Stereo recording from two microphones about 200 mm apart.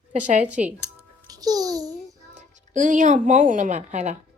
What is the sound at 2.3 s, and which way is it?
Speech, 40° right (ahead or behind).